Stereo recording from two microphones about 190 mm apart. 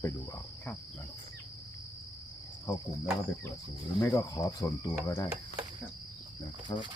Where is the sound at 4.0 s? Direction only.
15° left (ahead or behind).